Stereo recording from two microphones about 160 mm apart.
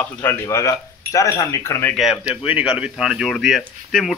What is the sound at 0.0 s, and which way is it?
Speech, 15° left (ahead or behind).